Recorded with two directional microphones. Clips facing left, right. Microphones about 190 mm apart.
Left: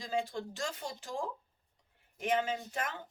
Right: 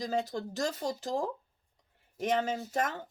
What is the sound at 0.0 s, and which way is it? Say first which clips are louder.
Speech: right 3 dB; 40° right (ahead or behind).